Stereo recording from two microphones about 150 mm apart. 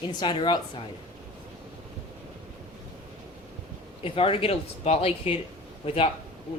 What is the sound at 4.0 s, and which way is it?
Speech, 35° left (ahead or behind).